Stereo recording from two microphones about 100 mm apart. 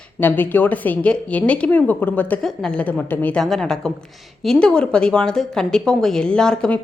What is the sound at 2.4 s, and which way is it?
A woman's voice, 5° left (ahead or behind).